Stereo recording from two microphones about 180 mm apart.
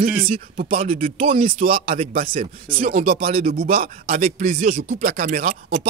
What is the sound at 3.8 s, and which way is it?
Speech, 45° right (ahead or behind).